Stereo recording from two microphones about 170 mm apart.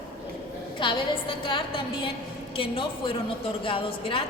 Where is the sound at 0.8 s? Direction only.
30° left (ahead or behind).